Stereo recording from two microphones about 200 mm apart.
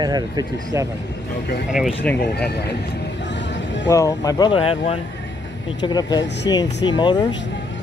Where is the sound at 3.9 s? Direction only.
15° left (ahead or behind).